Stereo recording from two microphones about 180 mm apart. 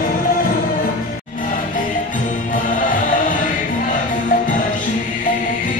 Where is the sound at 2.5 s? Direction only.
45° left (ahead or behind).